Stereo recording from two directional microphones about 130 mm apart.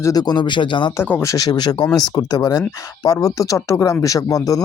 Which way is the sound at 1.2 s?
25° left (ahead or behind).